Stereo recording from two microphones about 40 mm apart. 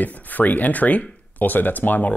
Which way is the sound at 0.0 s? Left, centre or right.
Left.